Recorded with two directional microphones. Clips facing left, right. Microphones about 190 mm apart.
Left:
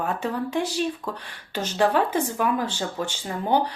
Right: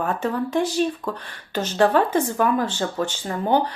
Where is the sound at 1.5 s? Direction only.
10° left (ahead or behind).